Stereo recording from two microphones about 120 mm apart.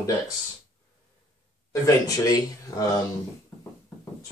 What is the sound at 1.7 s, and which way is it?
Speech, 30° left (ahead or behind).